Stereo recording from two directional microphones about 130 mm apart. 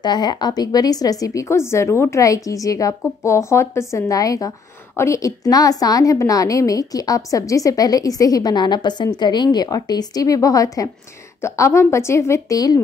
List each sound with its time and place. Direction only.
0.0 s a woman's voice: 35° left (ahead or behind)